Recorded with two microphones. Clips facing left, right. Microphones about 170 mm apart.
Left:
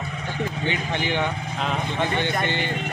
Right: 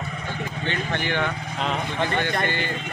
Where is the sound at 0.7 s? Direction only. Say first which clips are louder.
Right 1 dB; 15° left (ahead or behind).